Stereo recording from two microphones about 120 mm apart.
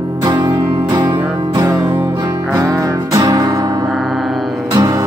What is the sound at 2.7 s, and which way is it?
Music, 30° right (ahead or behind).